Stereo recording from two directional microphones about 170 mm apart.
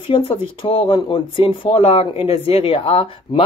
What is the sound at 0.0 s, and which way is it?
Speech, 30° left (ahead or behind).